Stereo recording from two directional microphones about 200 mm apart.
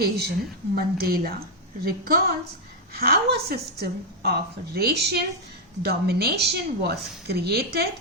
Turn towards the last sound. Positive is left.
turn(degrees=-50)  # may be behind; listen again after turning